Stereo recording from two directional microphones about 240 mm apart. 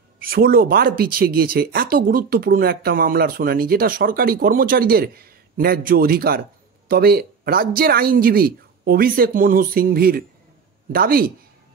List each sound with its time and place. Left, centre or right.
0.2 s speech: right